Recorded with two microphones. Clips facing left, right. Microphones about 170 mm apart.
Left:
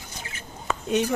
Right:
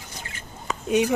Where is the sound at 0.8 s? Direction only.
10° right (ahead or behind).